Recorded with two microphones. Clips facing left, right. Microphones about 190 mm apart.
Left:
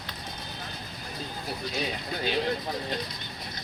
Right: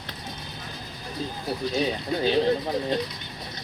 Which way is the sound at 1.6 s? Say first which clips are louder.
Right 7 dB; 30° right (ahead or behind).